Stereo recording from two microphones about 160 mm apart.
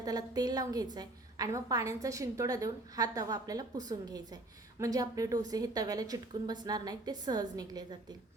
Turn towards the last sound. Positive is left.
turn(degrees=-25)  # may be behind; listen again after turning